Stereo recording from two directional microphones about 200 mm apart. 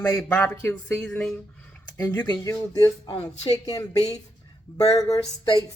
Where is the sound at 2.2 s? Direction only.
20° left (ahead or behind).